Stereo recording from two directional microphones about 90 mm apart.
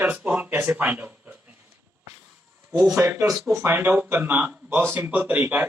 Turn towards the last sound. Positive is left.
turn(degrees=-20)  # may be behind; listen again after turning